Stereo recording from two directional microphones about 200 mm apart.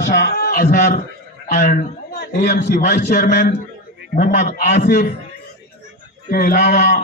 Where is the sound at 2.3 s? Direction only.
55° left (ahead or behind).